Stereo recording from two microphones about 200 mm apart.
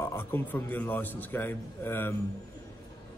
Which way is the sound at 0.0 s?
10° left (ahead or behind).